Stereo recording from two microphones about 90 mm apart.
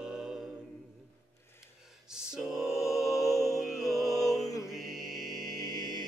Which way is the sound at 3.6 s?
Centre (ahead or behind).